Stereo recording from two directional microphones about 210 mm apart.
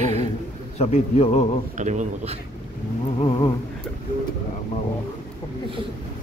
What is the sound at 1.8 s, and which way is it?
Speech, 35° right (ahead or behind).